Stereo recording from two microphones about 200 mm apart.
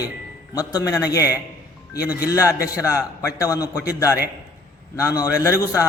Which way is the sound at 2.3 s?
15° left (ahead or behind).